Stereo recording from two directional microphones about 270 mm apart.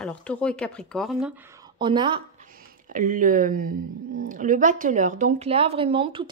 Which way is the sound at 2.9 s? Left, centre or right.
Right.